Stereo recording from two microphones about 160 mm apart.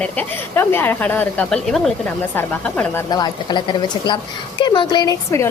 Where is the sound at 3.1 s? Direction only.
25° left (ahead or behind).